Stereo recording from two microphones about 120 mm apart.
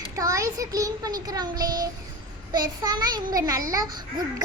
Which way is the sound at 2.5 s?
35° right (ahead or behind).